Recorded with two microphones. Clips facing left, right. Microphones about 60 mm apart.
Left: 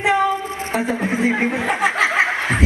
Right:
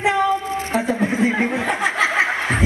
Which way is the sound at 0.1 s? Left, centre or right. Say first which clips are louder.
Left 2 dB; left.